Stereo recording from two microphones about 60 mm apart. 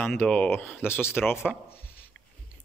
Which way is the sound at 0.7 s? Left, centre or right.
Left.